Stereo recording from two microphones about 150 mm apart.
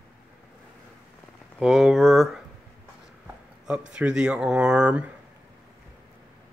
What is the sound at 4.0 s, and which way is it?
Speech, 5° right (ahead or behind).